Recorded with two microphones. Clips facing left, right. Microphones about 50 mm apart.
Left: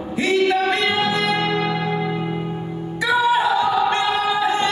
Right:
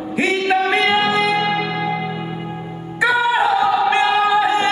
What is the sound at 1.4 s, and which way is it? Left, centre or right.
Music, centre.